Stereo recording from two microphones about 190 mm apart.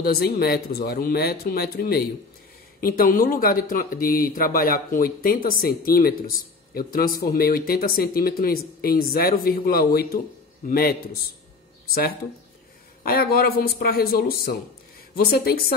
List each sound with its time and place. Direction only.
0.0 s speech: 55° left (ahead or behind)
13.0 s speech: 50° left (ahead or behind)